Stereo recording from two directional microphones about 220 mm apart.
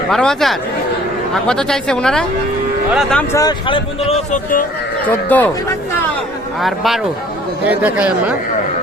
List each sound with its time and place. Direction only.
0.1 s speech: centre (ahead or behind)
3.3 s speech: 20° left (ahead or behind)
5.0 s speech: 5° left (ahead or behind)
6.6 s speech: centre (ahead or behind)